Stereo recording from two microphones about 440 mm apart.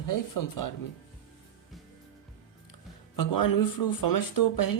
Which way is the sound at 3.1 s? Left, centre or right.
Left.